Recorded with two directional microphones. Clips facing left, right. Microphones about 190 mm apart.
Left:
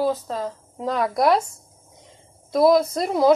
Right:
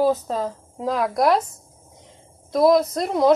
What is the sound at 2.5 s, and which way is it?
Speech, centre (ahead or behind).